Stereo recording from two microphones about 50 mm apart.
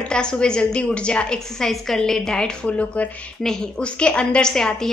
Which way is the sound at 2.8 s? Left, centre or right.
Left.